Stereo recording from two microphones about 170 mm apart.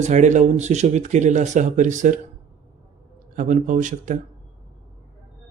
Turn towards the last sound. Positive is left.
turn(degrees=-50)  # may be behind; listen again after turning